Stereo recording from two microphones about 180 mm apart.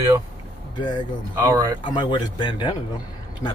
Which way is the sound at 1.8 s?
25° left (ahead or behind).